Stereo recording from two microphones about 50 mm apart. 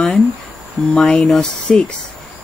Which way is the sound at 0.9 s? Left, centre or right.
Centre.